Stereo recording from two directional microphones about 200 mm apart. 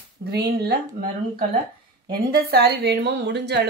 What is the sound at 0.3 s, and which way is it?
Speech, 50° right (ahead or behind).